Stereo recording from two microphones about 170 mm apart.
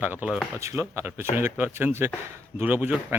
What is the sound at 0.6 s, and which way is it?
Speech, 15° right (ahead or behind).